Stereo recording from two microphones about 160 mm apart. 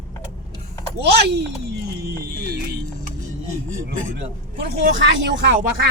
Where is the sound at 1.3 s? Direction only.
90° right.